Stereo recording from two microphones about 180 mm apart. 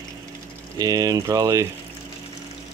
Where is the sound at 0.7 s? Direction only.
20° right (ahead or behind).